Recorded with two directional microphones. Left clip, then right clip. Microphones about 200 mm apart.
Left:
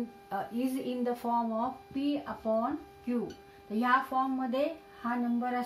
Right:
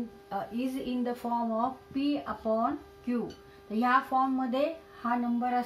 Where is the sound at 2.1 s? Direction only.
10° left (ahead or behind).